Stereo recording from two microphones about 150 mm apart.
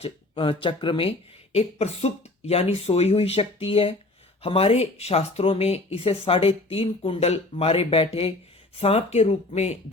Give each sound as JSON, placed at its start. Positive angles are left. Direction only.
{"t": 0.0, "sound": "speech", "side_deg": 35}